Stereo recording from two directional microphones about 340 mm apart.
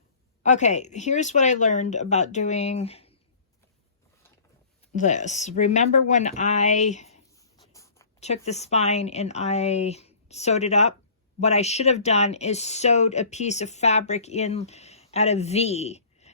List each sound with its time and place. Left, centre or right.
0.4 s speech: left
4.9 s speech: left
7.6 s writing: centre
8.3 s speech: centre